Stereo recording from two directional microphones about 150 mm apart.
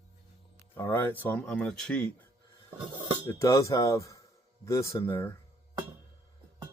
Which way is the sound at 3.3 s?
20° left (ahead or behind).